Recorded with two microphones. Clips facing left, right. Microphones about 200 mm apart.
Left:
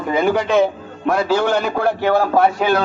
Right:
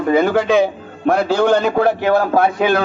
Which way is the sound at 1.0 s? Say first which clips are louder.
Right 3 dB; 60° right (ahead or behind).